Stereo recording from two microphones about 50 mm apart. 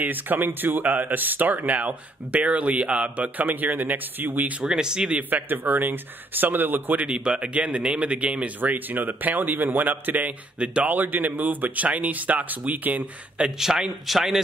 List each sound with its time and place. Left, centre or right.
0.0 s speech: right
4.6 s a man's voice: centre
5.3 s speech: right
7.2 s speech: right
8.5 s speech: right
10.6 s speech: right
10.9 s speech: right
13.6 s a man's voice: centre